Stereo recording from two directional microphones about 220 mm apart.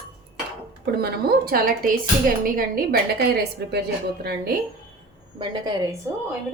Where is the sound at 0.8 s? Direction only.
45° right (ahead or behind).